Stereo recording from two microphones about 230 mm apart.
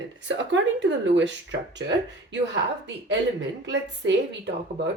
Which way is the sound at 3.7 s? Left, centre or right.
Right.